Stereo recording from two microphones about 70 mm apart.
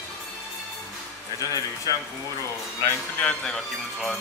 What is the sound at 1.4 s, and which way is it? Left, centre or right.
Speech, left.